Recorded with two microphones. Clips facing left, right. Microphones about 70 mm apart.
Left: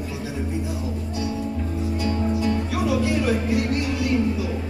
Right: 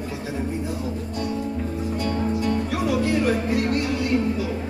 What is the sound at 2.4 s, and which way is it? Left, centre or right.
Music, right.